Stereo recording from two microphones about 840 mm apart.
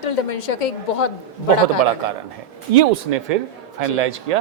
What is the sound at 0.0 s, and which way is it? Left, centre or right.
A woman's voice, left.